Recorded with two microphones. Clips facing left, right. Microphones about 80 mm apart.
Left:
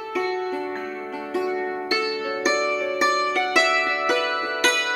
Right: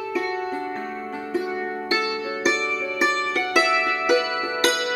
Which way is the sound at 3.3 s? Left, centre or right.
Left.